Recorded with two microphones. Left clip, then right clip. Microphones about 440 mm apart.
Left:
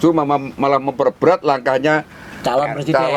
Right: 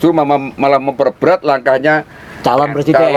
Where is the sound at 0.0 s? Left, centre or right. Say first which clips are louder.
Right 4 dB; centre.